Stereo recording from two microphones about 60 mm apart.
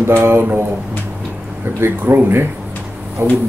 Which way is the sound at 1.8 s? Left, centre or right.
Right.